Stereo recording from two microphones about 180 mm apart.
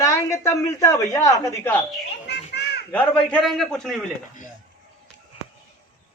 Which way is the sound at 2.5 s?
70° left (ahead or behind).